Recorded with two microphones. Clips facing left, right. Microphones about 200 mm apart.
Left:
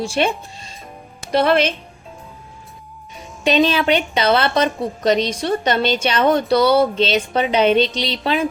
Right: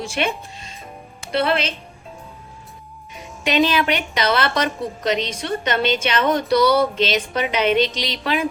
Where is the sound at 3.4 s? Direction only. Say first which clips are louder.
Left 2 dB; 30° left (ahead or behind).